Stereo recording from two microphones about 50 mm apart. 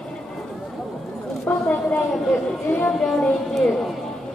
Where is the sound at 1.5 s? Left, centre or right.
Left.